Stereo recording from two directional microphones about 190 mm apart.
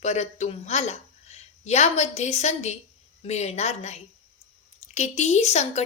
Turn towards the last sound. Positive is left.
turn(degrees=35)  # may be behind; listen again after turning